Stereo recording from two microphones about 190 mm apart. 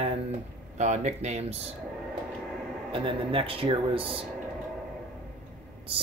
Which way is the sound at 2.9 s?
30° right (ahead or behind).